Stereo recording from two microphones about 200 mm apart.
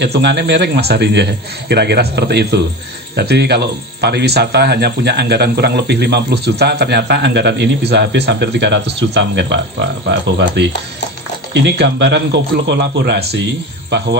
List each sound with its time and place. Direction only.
0.0 s speech: 60° right (ahead or behind)